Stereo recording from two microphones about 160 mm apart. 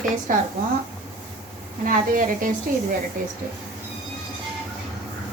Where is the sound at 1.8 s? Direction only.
55° right (ahead or behind).